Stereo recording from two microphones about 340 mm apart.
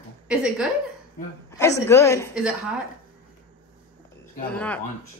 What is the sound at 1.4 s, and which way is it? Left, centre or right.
Speech, centre.